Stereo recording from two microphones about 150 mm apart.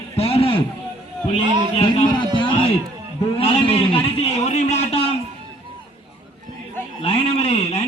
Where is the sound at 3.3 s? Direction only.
40° left (ahead or behind).